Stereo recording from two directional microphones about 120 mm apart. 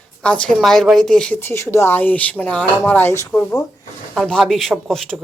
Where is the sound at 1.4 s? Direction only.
20° left (ahead or behind).